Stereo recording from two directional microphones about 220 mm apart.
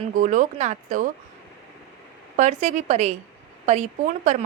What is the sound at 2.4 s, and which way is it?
A woman's voice, 30° right (ahead or behind).